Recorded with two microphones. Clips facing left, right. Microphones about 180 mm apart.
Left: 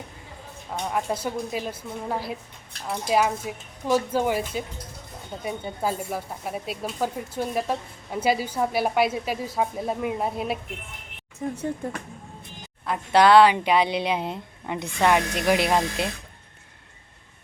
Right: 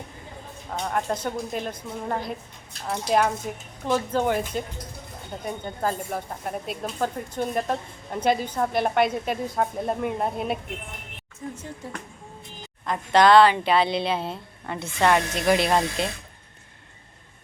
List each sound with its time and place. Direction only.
0.7 s speech: 5° left (ahead or behind)
11.8 s speech: 50° left (ahead or behind)
12.8 s speech: 5° left (ahead or behind)